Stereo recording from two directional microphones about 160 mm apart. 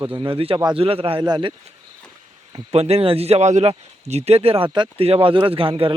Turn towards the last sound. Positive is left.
turn(degrees=-35)  # may be behind; listen again after turning